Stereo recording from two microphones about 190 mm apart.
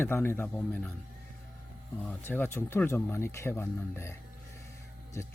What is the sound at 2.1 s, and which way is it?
Speech, 10° left (ahead or behind).